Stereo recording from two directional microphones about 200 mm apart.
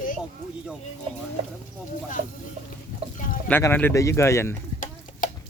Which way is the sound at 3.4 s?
10° left (ahead or behind).